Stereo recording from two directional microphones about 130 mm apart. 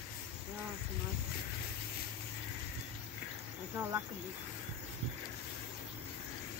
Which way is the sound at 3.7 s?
20° right (ahead or behind).